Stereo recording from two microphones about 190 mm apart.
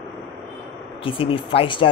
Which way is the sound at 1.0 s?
30° left (ahead or behind).